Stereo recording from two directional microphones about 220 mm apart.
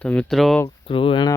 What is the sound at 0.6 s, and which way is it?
Speech, 25° left (ahead or behind).